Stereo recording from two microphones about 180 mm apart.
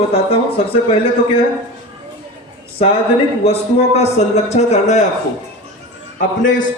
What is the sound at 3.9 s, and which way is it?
A man's voice, 35° left (ahead or behind).